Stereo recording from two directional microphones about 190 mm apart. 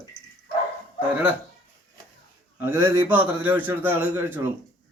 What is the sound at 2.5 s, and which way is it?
A man's voice, 15° right (ahead or behind).